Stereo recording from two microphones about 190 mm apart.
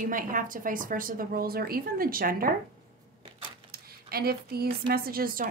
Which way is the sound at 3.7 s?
55° right (ahead or behind).